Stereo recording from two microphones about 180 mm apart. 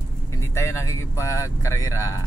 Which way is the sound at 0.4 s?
15° left (ahead or behind).